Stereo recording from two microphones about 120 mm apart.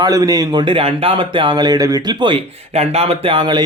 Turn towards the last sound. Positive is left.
turn(degrees=-40)  # may be behind; listen again after turning